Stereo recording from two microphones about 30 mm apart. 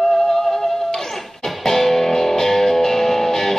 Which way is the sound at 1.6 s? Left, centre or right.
Centre.